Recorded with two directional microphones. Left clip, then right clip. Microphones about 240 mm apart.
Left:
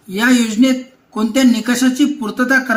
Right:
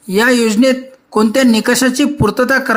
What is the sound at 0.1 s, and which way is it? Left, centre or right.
Speech, right.